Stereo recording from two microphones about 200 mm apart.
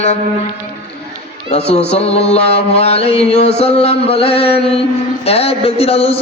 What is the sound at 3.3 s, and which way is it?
Speech, 30° left (ahead or behind).